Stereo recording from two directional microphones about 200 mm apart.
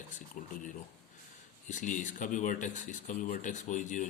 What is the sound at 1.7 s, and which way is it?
Speech, 40° left (ahead or behind).